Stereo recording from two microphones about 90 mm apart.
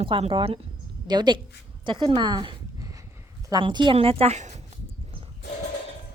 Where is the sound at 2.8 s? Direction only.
40° right (ahead or behind).